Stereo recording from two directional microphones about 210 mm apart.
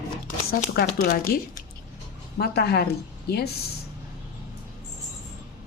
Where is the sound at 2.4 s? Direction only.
50° left (ahead or behind).